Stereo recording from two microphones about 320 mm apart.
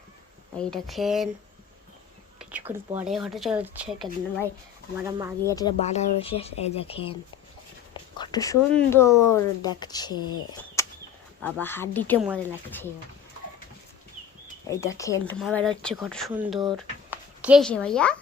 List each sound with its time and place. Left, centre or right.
0.5 s speech: centre
2.4 s speech: centre
5.5 s speech: centre
8.2 s speech: centre
14.7 s speech: centre